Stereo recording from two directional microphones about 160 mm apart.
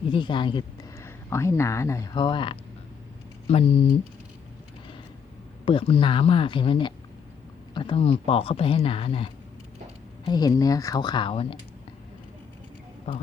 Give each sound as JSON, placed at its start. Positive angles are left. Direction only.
{"t": 0.1, "sound": "speech", "side_deg": 30}
{"t": 0.9, "sound": "speech", "side_deg": 15}
{"t": 2.1, "sound": "speech", "side_deg": 30}
{"t": 5.6, "sound": "speech", "side_deg": 35}
{"t": 10.2, "sound": "speech", "side_deg": 25}